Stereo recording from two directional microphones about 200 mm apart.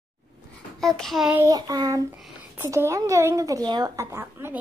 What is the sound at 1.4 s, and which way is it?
A woman's voice, 20° right (ahead or behind).